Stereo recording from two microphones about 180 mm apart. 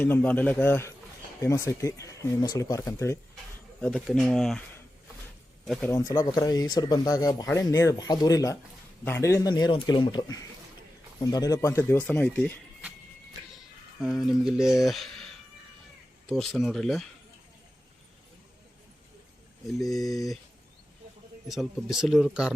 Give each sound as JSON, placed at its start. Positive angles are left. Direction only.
{"t": 0.0, "sound": "speech", "side_deg": 10}
{"t": 3.8, "sound": "speech", "side_deg": 5}
{"t": 5.6, "sound": "speech", "side_deg": 0}
{"t": 5.9, "sound": "speech", "side_deg": 15}
{"t": 14.0, "sound": "speech", "side_deg": 0}
{"t": 16.3, "sound": "speech", "side_deg": 0}
{"t": 19.9, "sound": "speech", "side_deg": 0}
{"t": 21.4, "sound": "speech", "side_deg": 0}